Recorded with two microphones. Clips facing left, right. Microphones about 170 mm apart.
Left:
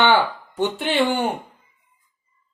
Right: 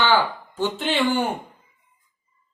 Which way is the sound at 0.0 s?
20° left (ahead or behind).